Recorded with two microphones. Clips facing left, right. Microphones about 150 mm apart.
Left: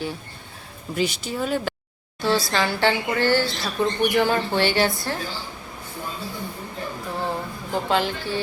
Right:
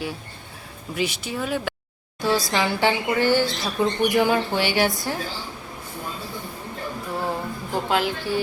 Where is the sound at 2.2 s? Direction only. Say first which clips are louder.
Even; 15° right (ahead or behind).